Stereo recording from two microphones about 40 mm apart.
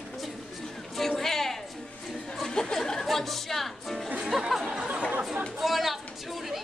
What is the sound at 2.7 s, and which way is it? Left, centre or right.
Music, centre.